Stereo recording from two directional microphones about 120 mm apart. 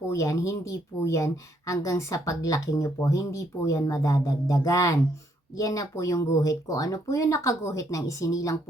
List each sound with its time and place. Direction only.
0.1 s speech: 25° left (ahead or behind)